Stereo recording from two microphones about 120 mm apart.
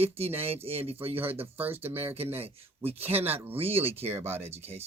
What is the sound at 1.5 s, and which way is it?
Speech, 15° right (ahead or behind).